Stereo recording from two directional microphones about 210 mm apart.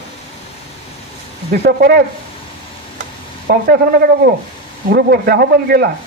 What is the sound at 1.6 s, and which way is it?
Speech, 45° right (ahead or behind).